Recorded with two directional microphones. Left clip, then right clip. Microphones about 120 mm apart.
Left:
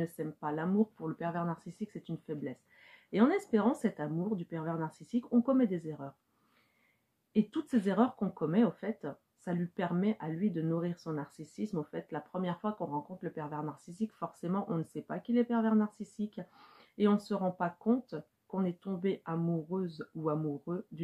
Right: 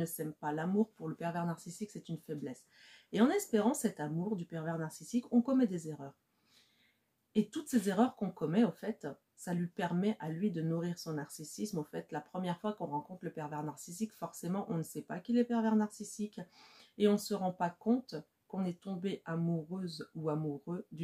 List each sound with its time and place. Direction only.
0.0 s speech: 15° right (ahead or behind)
7.6 s speech: 15° right (ahead or behind)